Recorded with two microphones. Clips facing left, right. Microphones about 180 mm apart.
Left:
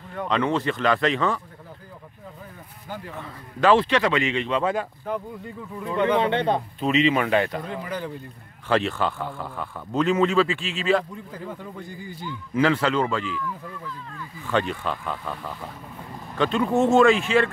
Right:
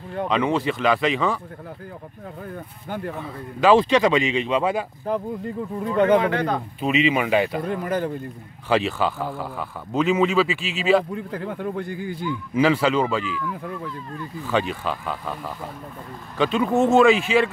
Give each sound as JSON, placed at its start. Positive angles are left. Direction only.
{"t": 0.3, "sound": "speech", "side_deg": -10}
{"t": 2.5, "sound": "speech", "side_deg": -60}
{"t": 3.2, "sound": "speech", "side_deg": -10}
{"t": 5.1, "sound": "speech", "side_deg": -35}
{"t": 6.1, "sound": "speech", "side_deg": 25}
{"t": 6.8, "sound": "speech", "side_deg": -10}
{"t": 7.6, "sound": "speech", "side_deg": -50}
{"t": 8.6, "sound": "speech", "side_deg": -10}
{"t": 11.1, "sound": "speech", "side_deg": -65}
{"t": 12.5, "sound": "speech", "side_deg": -10}
{"t": 14.4, "sound": "speech", "side_deg": -5}